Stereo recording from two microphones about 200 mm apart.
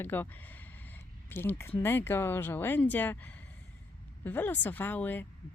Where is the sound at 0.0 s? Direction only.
10° left (ahead or behind).